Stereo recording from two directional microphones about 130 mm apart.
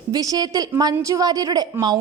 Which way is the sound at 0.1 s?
30° right (ahead or behind).